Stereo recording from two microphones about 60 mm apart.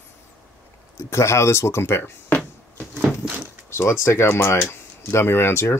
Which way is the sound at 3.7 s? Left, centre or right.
Left.